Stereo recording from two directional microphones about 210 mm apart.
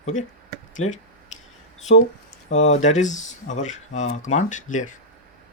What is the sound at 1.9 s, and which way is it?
Speech, 35° left (ahead or behind).